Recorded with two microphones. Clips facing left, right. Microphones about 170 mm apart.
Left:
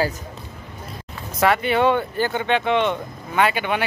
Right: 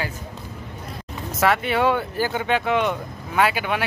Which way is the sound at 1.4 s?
Centre (ahead or behind).